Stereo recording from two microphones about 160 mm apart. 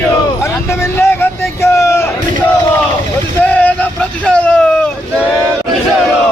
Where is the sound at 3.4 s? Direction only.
10° left (ahead or behind).